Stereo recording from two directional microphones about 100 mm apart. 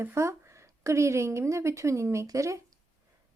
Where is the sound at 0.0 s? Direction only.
30° right (ahead or behind).